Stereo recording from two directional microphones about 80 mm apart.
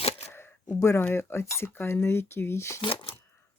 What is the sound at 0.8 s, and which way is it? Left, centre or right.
Speech, left.